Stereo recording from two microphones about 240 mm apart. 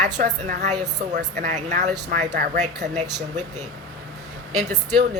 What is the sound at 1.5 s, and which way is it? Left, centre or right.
A woman's voice, right.